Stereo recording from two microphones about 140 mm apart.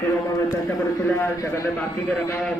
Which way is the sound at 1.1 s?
15° left (ahead or behind).